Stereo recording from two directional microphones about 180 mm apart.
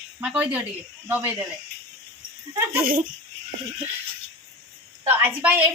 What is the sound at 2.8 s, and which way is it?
Speech, 50° right (ahead or behind).